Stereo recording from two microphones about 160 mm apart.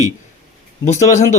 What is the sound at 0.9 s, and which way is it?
Speech, 45° left (ahead or behind).